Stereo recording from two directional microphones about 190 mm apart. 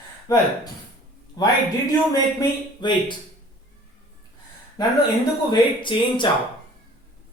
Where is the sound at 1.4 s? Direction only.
20° left (ahead or behind).